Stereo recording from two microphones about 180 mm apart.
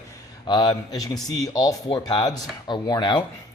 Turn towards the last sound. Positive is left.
turn(degrees=25)  # may be behind; listen again after turning